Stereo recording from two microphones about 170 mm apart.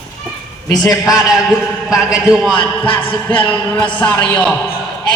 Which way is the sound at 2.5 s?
30° left (ahead or behind).